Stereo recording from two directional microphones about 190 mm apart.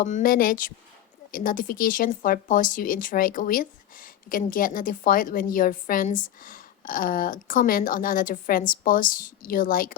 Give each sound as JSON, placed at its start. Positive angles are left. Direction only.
{"t": 0.0, "sound": "speech", "side_deg": 45}